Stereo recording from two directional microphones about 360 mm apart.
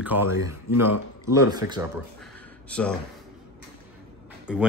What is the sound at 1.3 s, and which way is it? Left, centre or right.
Speech, centre.